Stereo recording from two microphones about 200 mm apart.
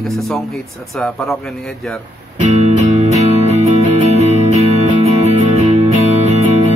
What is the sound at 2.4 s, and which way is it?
Music, 35° right (ahead or behind).